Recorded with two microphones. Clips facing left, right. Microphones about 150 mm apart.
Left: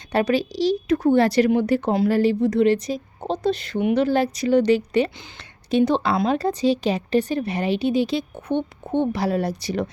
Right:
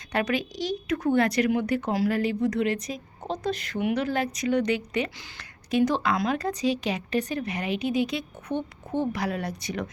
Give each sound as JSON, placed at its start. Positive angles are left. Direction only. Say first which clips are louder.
{"t": 0.1, "sound": "a woman's voice", "louder": "left 6 dB", "side_deg": 35}